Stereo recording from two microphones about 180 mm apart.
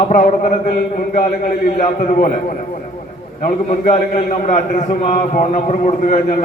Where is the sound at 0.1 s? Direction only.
50° left (ahead or behind).